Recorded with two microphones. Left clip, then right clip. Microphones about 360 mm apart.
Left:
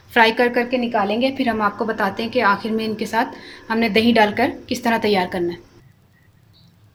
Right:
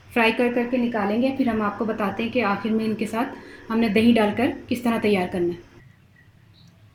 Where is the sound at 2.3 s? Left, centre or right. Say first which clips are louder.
Left 7 dB; left.